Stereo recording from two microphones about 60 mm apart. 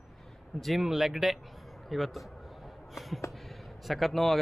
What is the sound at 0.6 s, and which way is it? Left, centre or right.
Speech, centre.